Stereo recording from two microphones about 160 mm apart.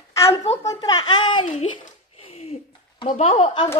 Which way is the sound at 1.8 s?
40° left (ahead or behind).